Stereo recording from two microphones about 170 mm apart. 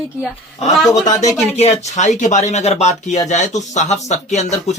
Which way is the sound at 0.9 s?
45° left (ahead or behind).